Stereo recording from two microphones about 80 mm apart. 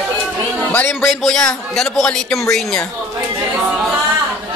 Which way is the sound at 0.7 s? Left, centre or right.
Left.